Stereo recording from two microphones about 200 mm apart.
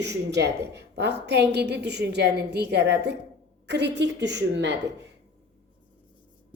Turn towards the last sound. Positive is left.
turn(degrees=-60)  # may be behind; listen again after turning